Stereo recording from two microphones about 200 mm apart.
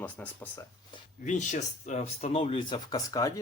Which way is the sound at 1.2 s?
40° left (ahead or behind).